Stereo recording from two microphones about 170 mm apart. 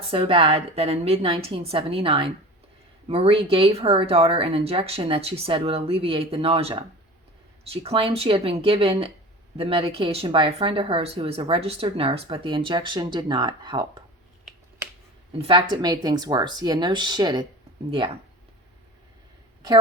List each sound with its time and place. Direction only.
0.1 s speech: 35° right (ahead or behind)
15.4 s speech: 30° right (ahead or behind)